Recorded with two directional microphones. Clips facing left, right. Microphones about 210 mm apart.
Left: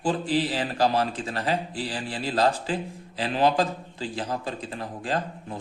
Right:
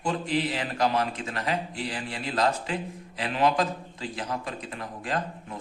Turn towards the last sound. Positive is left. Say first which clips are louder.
# left 2 dB
turn(degrees=30)  # may be behind; listen again after turning